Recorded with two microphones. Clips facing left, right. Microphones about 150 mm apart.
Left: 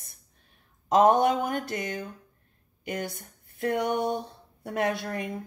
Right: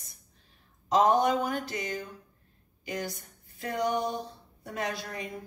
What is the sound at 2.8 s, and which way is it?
Speech, 55° left (ahead or behind).